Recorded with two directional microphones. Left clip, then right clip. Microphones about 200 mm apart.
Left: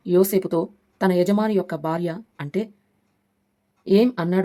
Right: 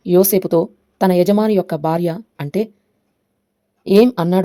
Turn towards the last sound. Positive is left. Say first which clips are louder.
# right 6 dB
turn(degrees=-20)  # may be behind; listen again after turning